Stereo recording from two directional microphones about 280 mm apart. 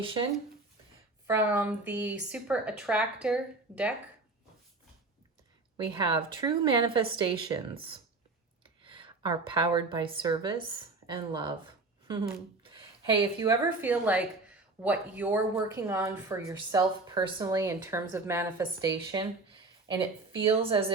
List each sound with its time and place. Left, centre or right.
0.0 s speech: centre
1.3 s a woman's voice: centre
5.7 s a woman's voice: centre
12.6 s a woman's voice: centre